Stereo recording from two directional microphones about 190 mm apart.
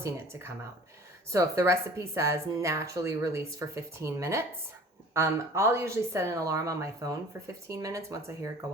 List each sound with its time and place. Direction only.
0.0 s a woman's voice: 15° right (ahead or behind)